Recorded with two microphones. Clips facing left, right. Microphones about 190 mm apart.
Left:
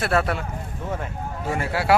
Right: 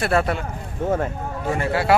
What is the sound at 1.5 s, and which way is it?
Speech, 5° left (ahead or behind).